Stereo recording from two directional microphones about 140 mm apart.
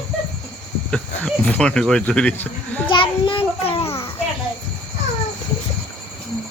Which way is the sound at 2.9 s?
35° left (ahead or behind).